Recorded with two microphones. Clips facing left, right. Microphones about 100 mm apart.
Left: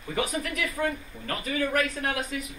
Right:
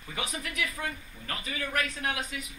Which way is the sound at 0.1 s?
40° left (ahead or behind).